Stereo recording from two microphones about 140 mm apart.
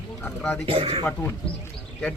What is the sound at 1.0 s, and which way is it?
Speech, 15° left (ahead or behind).